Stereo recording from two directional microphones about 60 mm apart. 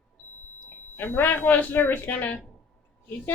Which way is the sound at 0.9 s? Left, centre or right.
Left.